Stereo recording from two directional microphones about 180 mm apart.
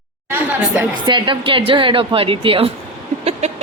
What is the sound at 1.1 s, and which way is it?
Speech, 25° right (ahead or behind).